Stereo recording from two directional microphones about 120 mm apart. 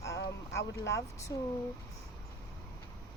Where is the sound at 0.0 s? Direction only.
25° left (ahead or behind).